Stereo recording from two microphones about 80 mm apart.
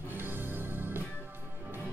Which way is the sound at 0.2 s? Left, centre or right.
Right.